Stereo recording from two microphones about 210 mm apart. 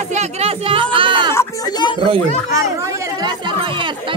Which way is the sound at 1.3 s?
15° left (ahead or behind).